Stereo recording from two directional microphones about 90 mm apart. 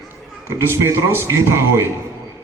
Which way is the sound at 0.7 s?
30° right (ahead or behind).